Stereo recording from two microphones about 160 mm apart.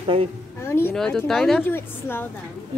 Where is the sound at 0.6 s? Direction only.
15° left (ahead or behind).